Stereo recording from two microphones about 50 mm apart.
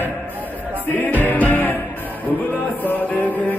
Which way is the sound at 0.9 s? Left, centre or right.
Left.